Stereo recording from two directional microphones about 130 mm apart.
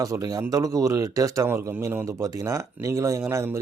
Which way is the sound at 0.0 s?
30° right (ahead or behind).